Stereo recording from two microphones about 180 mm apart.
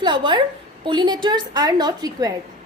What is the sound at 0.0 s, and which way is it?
A woman's voice, 25° right (ahead or behind).